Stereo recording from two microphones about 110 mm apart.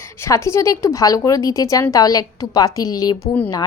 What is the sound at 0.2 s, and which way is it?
A woman's voice, 25° left (ahead or behind).